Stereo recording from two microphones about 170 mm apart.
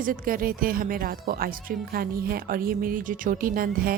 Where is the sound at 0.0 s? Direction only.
55° right (ahead or behind).